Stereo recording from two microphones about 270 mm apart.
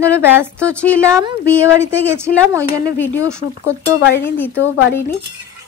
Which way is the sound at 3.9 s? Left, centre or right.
Left.